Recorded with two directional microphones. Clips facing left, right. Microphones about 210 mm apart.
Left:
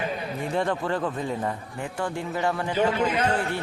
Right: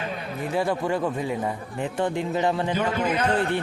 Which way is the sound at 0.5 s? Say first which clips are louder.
Right 2 dB; 10° right (ahead or behind).